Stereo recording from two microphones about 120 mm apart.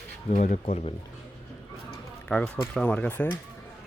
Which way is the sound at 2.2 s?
5° left (ahead or behind).